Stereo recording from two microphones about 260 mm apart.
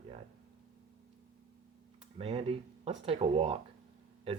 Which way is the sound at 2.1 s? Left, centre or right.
Right.